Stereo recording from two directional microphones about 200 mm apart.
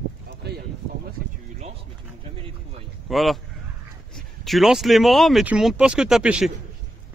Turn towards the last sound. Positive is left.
turn(degrees=-5)  # may be behind; listen again after turning